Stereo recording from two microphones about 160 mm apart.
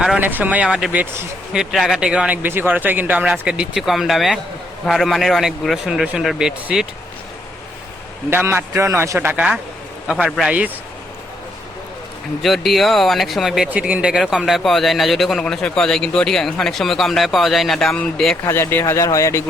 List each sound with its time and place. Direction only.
0.0 s speech: 5° right (ahead or behind)
1.5 s speech: centre (ahead or behind)
8.3 s speech: 15° right (ahead or behind)
12.4 s speech: centre (ahead or behind)
18.4 s speech: 15° left (ahead or behind)